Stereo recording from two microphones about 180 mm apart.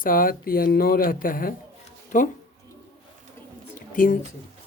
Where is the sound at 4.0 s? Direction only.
50° left (ahead or behind).